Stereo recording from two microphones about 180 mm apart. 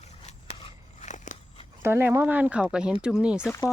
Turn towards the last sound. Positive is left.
turn(degrees=-5)  # may be behind; listen again after turning